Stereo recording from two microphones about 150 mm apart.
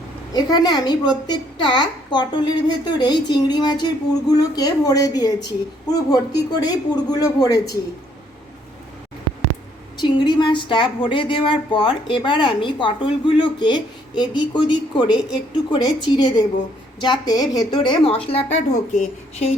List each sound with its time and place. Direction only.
0.3 s a woman's voice: 30° left (ahead or behind)
10.0 s a woman's voice: 30° left (ahead or behind); by 19.5 s 50° left (ahead or behind)